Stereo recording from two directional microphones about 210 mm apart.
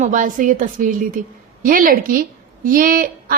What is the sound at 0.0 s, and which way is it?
A woman's voice, 35° right (ahead or behind).